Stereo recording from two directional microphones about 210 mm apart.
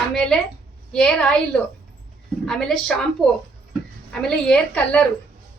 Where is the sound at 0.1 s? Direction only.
Centre (ahead or behind).